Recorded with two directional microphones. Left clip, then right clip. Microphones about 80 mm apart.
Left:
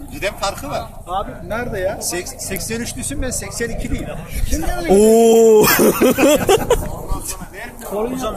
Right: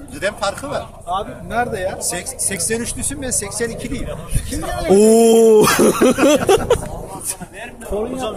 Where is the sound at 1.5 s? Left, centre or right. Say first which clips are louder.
Right 3 dB; centre.